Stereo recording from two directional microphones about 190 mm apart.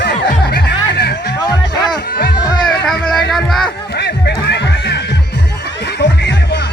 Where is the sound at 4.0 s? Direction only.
60° left (ahead or behind).